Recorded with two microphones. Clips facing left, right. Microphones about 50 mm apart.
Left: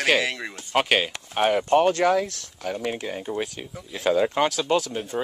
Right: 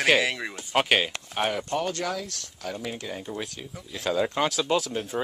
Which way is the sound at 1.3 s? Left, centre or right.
Centre.